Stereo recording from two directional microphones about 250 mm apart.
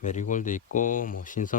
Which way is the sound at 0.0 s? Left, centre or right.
Left.